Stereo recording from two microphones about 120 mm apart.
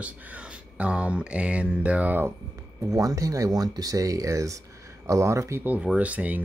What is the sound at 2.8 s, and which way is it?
Speech, 30° right (ahead or behind).